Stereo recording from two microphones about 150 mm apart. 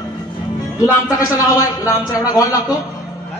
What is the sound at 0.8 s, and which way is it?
A man's voice, 20° left (ahead or behind).